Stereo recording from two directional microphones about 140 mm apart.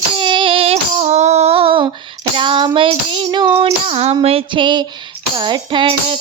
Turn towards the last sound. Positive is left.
turn(degrees=-35)  # may be behind; listen again after turning